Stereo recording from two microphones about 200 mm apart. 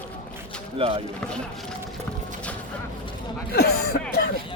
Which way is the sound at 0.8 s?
25° right (ahead or behind).